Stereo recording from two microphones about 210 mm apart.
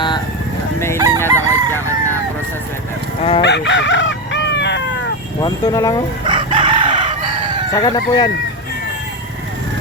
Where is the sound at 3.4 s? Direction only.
55° left (ahead or behind).